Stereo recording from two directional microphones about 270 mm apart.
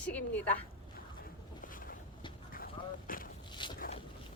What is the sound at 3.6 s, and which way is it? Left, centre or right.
Boat, centre.